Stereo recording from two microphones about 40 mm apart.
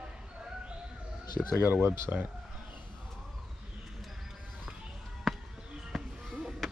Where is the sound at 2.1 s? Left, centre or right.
Right.